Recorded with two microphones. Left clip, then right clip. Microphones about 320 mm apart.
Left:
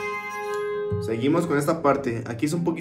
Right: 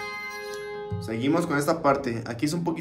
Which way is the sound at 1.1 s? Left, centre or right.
Centre.